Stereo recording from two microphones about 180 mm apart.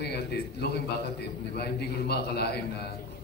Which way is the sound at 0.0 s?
65° left (ahead or behind).